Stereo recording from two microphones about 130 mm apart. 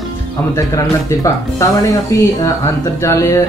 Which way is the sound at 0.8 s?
25° left (ahead or behind).